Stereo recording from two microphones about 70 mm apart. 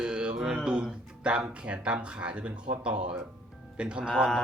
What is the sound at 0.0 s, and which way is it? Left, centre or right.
Speech, centre.